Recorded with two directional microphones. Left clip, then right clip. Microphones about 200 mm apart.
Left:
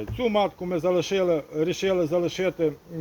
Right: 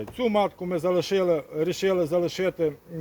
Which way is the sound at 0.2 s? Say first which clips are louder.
Even; 25° right (ahead or behind).